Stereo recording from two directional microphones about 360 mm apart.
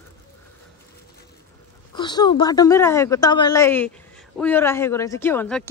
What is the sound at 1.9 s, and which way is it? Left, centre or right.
A woman's voice, centre.